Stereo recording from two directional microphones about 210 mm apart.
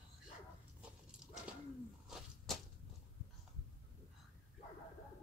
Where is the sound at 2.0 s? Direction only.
Centre (ahead or behind).